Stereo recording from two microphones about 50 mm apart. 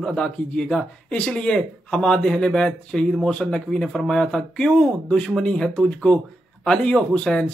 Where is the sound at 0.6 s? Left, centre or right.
Centre.